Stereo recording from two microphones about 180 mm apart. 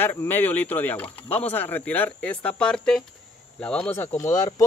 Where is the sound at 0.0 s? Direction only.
10° left (ahead or behind).